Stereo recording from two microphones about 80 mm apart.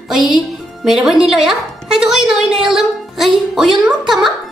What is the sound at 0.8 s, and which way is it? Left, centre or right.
A woman's voice, centre.